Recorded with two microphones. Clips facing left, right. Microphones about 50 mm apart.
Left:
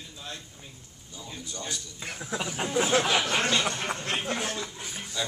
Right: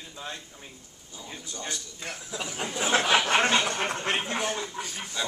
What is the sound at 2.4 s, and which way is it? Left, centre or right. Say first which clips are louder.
Speech: left 1 dB; centre.